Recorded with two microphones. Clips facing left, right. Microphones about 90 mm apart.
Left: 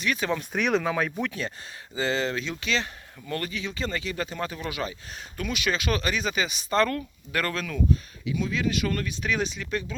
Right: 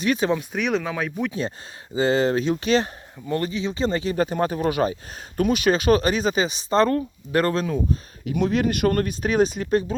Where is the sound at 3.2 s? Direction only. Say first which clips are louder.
Right 7 dB; 25° right (ahead or behind).